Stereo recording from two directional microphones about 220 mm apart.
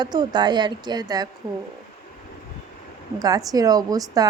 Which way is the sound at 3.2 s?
15° right (ahead or behind).